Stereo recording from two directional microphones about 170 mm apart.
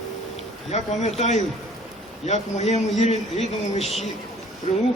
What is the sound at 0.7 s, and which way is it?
A man's voice, 40° left (ahead or behind).